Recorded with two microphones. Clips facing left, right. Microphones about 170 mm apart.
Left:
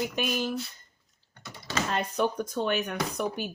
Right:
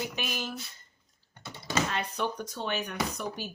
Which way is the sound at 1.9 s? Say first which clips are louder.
Left 5 dB; 50° left (ahead or behind).